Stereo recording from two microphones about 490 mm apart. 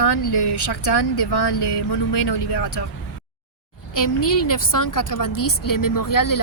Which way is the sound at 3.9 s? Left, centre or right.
Left.